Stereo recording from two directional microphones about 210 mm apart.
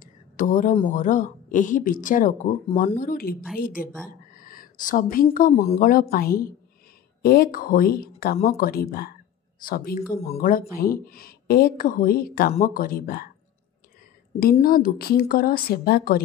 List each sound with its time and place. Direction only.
0.0 s a sound: 40° left (ahead or behind)
0.8 s a woman's voice: 35° left (ahead or behind)
14.4 s speech: 45° left (ahead or behind)